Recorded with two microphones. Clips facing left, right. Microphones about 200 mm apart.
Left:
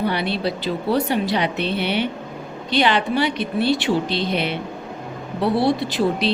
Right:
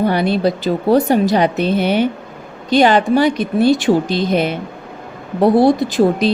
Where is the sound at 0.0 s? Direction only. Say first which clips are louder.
Right 7 dB; 45° right (ahead or behind).